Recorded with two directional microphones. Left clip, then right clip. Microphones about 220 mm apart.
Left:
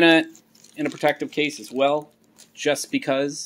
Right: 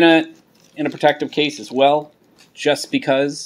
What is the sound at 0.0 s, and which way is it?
Speech, 10° left (ahead or behind).